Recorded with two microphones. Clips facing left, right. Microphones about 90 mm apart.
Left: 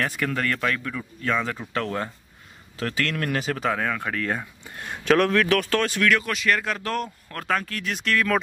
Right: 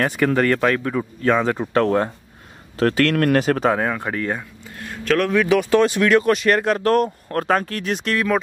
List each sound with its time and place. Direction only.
0.0 s speech: 35° right (ahead or behind)
2.8 s speech: 60° right (ahead or behind)
3.6 s speech: 30° right (ahead or behind)
4.4 s speech: 5° left (ahead or behind)
5.3 s speech: 10° right (ahead or behind)
6.2 s speech: 45° right (ahead or behind); by 8.3 s 25° right (ahead or behind)